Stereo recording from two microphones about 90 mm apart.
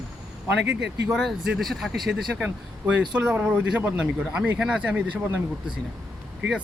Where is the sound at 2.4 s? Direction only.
15° right (ahead or behind).